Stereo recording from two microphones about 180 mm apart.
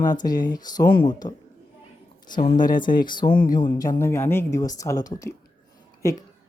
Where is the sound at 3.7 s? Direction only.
15° left (ahead or behind).